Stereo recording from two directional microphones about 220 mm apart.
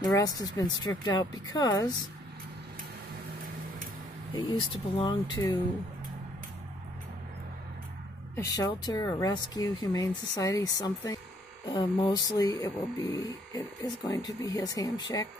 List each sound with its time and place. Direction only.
0.0 s speech: 15° left (ahead or behind)
4.4 s speech: 25° left (ahead or behind)
8.4 s speech: 15° left (ahead or behind)